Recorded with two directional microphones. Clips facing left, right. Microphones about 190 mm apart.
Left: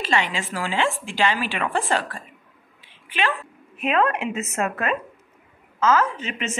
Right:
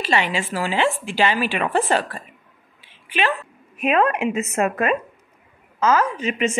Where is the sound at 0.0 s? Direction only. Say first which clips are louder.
Right 2 dB; 15° right (ahead or behind).